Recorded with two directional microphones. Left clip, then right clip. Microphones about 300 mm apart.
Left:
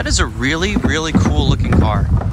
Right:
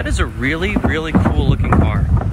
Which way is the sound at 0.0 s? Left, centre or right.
Centre.